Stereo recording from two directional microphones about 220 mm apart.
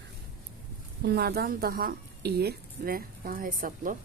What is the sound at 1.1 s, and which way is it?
A woman's voice, 45° right (ahead or behind).